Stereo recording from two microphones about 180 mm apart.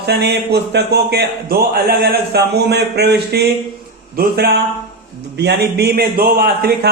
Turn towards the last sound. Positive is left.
turn(degrees=-60)  # may be behind; listen again after turning